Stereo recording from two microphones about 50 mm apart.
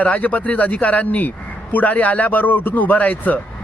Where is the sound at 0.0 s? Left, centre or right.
Left.